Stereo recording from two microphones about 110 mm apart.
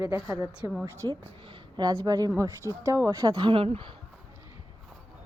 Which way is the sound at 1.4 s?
45° right (ahead or behind).